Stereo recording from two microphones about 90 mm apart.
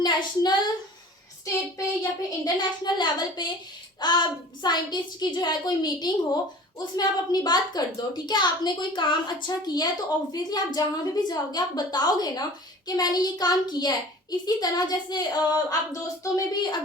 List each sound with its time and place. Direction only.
0.0 s a woman's voice: 50° left (ahead or behind)
2.0 s a woman's voice: 50° left (ahead or behind)
15.9 s a woman's voice: 40° left (ahead or behind)